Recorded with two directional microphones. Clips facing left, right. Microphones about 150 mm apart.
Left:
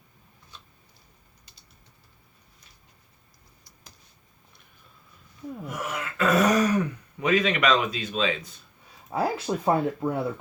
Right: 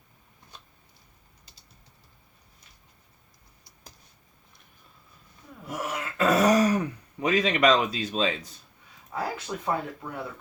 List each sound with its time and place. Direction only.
5.7 s throat clearing: 35° right (ahead or behind)
9.1 s speech: 35° left (ahead or behind)